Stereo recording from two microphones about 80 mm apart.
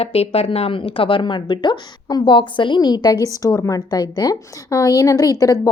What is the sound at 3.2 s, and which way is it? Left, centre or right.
A woman's voice, left.